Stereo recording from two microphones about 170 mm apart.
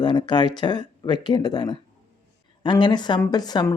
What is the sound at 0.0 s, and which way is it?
Speech, 25° left (ahead or behind).